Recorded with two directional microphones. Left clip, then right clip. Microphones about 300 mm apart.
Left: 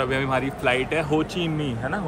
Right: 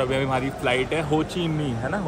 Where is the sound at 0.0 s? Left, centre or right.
Centre.